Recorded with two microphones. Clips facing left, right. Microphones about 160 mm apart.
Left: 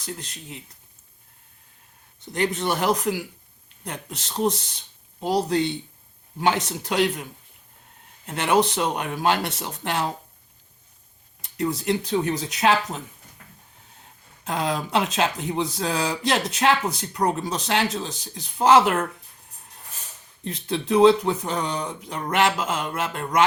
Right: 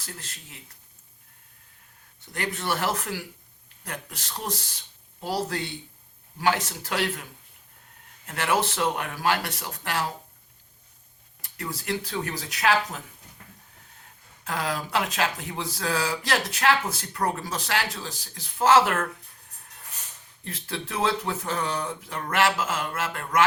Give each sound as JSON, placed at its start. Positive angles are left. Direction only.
{"t": 0.0, "sound": "speech", "side_deg": 20}
{"t": 2.2, "sound": "speech", "side_deg": 20}
{"t": 8.3, "sound": "speech", "side_deg": 20}
{"t": 11.4, "sound": "speech", "side_deg": 20}
{"t": 14.4, "sound": "speech", "side_deg": 20}
{"t": 20.4, "sound": "speech", "side_deg": 20}